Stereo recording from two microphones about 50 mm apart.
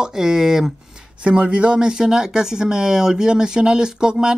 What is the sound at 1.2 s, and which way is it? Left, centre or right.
Speech, right.